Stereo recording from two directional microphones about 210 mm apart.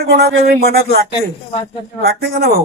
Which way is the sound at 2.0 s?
50° right (ahead or behind).